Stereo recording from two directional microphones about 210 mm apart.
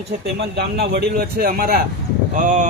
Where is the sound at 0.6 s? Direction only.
50° right (ahead or behind).